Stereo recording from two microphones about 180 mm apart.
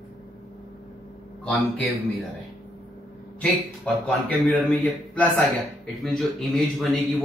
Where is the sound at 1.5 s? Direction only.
Centre (ahead or behind).